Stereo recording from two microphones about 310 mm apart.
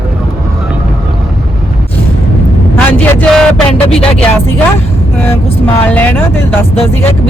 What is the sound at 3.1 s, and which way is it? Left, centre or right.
Speech, centre.